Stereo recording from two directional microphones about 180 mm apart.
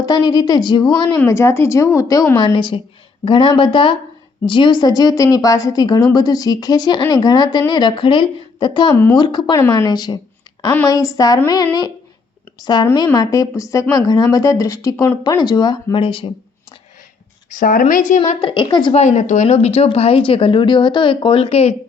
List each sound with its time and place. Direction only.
0.0 s a woman's voice: 20° left (ahead or behind)
2.4 s a woman's voice: 25° left (ahead or behind)
17.5 s speech: 50° left (ahead or behind)
18.2 s speech: 30° left (ahead or behind)
19.0 s speech: 40° left (ahead or behind)